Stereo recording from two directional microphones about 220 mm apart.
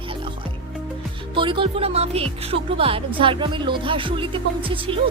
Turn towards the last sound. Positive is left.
turn(degrees=-25)  # may be behind; listen again after turning